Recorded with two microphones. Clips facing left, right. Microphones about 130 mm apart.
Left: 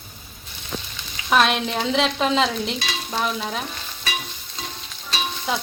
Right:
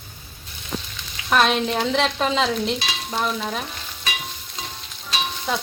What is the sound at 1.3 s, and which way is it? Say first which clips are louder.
Stir: even; centre (ahead or behind).